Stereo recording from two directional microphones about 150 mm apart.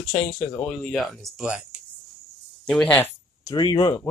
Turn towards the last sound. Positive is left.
turn(degrees=30)  # may be behind; listen again after turning